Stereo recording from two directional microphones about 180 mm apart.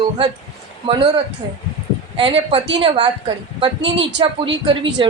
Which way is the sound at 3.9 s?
90° right.